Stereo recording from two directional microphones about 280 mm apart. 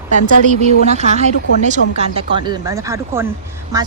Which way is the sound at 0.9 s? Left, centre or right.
Right.